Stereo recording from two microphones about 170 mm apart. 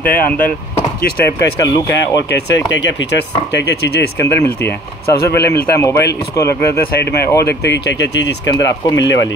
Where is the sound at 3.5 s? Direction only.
80° left.